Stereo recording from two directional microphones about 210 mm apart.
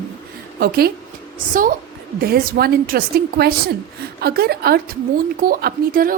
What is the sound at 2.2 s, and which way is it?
A woman's voice, 45° right (ahead or behind).